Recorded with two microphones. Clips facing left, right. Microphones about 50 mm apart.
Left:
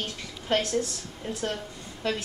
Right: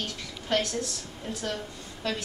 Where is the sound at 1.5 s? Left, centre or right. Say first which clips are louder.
Even; centre.